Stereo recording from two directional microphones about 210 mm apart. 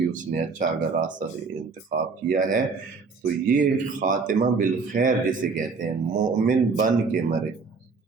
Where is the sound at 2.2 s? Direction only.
40° right (ahead or behind).